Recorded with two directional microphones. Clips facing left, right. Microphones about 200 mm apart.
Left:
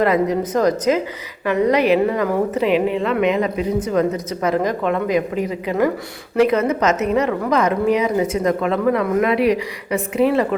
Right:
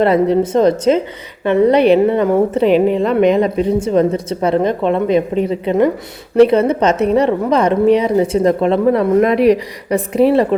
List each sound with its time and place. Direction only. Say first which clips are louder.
0.0 s a woman's voice: right 5 dB; 30° right (ahead or behind)